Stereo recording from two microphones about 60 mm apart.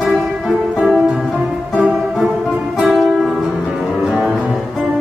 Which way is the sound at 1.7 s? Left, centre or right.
Centre.